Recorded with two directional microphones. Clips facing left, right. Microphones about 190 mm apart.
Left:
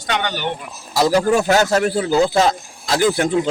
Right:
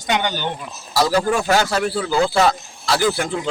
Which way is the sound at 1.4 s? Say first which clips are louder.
Left 3 dB; 45° left (ahead or behind).